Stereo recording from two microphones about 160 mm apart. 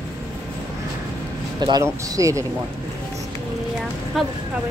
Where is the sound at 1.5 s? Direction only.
25° right (ahead or behind).